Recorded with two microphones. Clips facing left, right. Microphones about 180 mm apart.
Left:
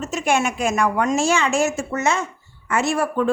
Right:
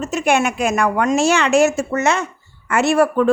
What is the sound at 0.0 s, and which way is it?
Speech, 65° right (ahead or behind).